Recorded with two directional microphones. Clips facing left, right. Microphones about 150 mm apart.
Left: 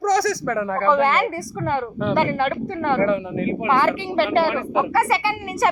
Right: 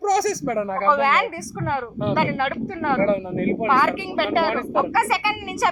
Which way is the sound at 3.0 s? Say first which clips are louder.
Even; 35° right (ahead or behind).